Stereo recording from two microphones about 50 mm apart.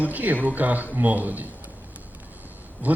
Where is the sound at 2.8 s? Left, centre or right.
Right.